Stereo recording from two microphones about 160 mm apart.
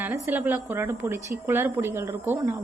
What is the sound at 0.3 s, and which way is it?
A woman's voice, 10° right (ahead or behind).